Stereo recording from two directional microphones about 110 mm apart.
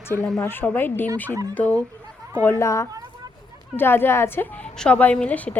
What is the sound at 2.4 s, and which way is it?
A woman's voice, 25° left (ahead or behind).